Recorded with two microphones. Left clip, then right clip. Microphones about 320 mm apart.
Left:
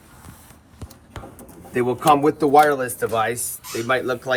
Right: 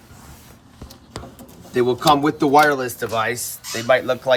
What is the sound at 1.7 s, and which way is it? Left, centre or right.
Speech, right.